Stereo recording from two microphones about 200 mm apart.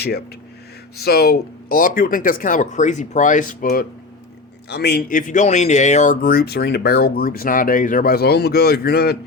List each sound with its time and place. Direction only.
0.9 s speech: 50° left (ahead or behind)